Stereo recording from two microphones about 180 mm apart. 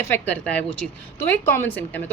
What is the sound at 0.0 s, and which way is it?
A woman's voice, 10° left (ahead or behind).